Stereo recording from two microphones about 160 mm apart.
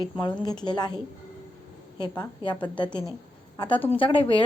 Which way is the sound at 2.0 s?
30° left (ahead or behind).